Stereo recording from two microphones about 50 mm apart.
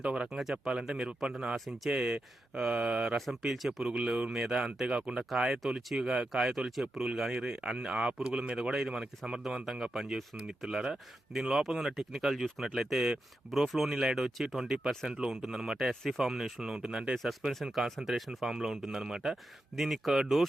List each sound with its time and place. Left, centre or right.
0.0 s speech: right
1.5 s speech: centre
1.9 s speech: centre
3.2 s speech: centre; by 5.2 s right
5.3 s speech: centre
8.5 s speech: centre
17.2 s speech: centre